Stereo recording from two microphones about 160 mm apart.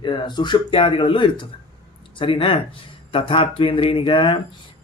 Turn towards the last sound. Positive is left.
turn(degrees=35)  # may be behind; listen again after turning